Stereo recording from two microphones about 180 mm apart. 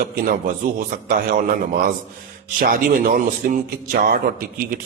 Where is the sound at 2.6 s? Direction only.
55° right (ahead or behind).